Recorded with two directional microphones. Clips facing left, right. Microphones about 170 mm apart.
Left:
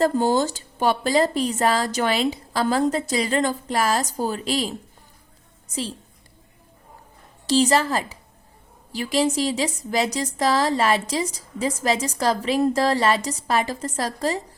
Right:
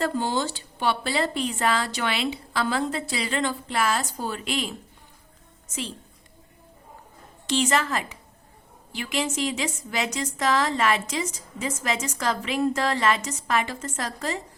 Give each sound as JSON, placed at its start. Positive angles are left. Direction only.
{"t": 0.0, "sound": "a woman's voice", "side_deg": 40}
{"t": 7.4, "sound": "a woman's voice", "side_deg": 35}